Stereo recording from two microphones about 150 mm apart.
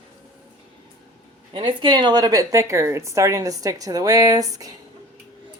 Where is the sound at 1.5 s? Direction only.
30° right (ahead or behind).